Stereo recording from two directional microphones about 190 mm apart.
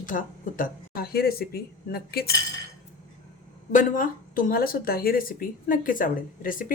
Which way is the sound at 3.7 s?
45° left (ahead or behind).